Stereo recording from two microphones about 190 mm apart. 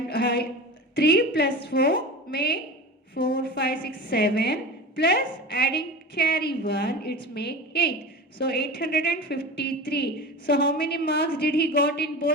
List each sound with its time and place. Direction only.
0.1 s a woman's voice: 55° left (ahead or behind)